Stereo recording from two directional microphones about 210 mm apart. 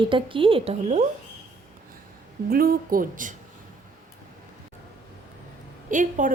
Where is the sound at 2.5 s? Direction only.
45° right (ahead or behind).